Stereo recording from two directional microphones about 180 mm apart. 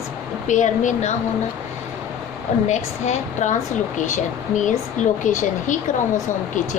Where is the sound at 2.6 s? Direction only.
40° left (ahead or behind).